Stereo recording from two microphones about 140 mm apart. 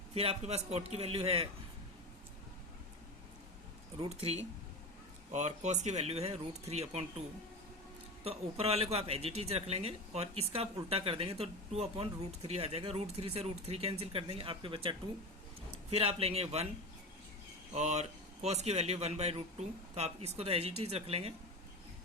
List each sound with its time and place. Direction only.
0.1 s speech: 45° right (ahead or behind)
3.9 s speech: 45° right (ahead or behind)
5.3 s speech: 60° right (ahead or behind)
8.2 s speech: 45° right (ahead or behind)
17.7 s speech: 55° right (ahead or behind)